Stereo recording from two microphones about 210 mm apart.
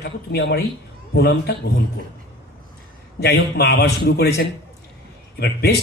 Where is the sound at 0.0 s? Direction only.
50° left (ahead or behind).